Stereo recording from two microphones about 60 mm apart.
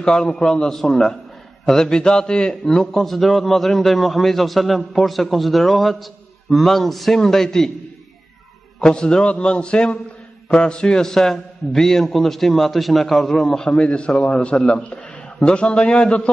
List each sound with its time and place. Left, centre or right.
0.0 s a man's voice: centre
8.8 s a man's voice: centre
13.7 s a man's voice: centre